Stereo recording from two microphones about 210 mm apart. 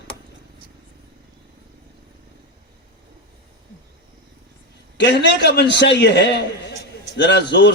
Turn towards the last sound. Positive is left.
turn(degrees=55)  # may be behind; listen again after turning